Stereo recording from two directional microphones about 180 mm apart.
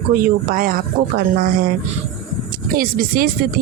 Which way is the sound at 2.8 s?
50° right (ahead or behind).